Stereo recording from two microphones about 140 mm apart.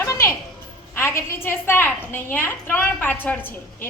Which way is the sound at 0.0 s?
20° left (ahead or behind).